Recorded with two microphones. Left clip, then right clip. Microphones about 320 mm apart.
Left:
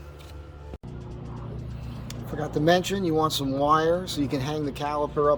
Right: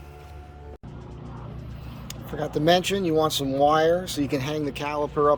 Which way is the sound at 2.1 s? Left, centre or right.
Centre.